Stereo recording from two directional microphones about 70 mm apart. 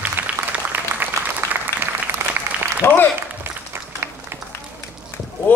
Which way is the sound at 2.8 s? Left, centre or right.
Left.